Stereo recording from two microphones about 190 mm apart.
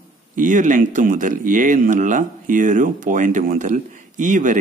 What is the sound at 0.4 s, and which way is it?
Speech, 45° right (ahead or behind).